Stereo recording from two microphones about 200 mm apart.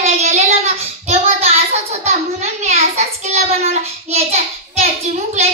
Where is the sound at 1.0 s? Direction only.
30° right (ahead or behind).